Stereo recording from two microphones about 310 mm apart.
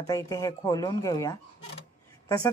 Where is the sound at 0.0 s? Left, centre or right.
Centre.